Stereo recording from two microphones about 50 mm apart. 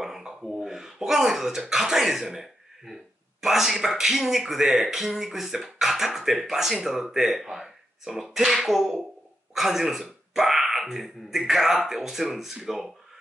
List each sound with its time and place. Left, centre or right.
0.0 s speech: centre